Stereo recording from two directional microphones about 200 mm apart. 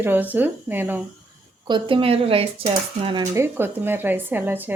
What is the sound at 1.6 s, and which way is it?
Speech, 25° right (ahead or behind).